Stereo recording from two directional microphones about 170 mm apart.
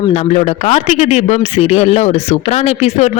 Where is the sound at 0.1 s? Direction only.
40° left (ahead or behind).